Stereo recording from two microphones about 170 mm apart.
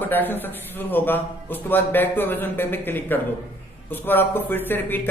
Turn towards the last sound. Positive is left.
turn(degrees=10)  # may be behind; listen again after turning